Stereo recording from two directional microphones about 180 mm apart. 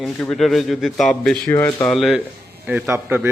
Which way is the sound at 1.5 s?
15° left (ahead or behind).